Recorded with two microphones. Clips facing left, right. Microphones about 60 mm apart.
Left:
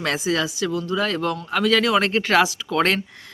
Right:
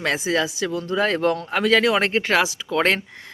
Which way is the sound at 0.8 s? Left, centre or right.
Right.